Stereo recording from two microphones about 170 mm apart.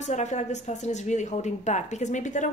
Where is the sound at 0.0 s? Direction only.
45° left (ahead or behind).